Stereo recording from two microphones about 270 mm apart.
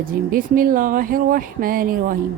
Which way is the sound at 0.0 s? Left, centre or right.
Right.